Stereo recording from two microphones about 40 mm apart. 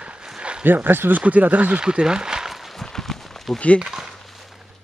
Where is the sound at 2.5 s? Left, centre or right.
Centre.